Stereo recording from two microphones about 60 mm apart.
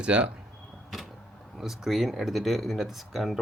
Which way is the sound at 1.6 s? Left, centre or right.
Centre.